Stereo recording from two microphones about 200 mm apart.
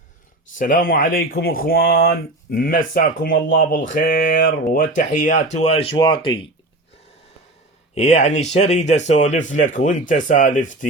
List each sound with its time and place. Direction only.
0.6 s speech: 45° left (ahead or behind); by 6.5 s 25° left (ahead or behind)
7.9 s speech: 35° left (ahead or behind)